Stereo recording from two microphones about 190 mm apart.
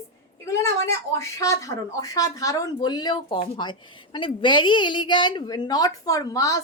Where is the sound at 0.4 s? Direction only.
15° left (ahead or behind).